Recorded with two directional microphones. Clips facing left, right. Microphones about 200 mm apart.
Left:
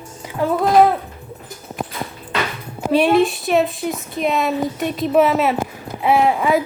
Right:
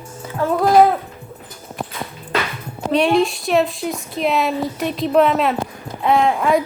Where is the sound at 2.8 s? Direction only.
5° left (ahead or behind).